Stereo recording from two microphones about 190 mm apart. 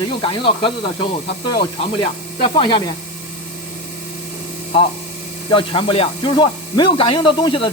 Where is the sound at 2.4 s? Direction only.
25° left (ahead or behind).